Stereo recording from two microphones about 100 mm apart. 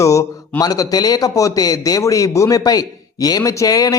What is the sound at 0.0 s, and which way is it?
Speech, 30° left (ahead or behind).